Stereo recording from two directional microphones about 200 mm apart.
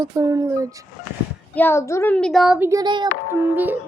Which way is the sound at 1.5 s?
10° left (ahead or behind).